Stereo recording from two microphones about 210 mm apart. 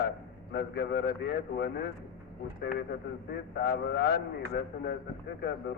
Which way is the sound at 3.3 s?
50° left (ahead or behind).